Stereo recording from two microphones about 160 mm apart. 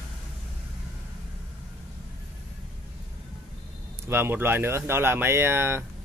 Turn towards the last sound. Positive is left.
turn(degrees=-15)  # may be behind; listen again after turning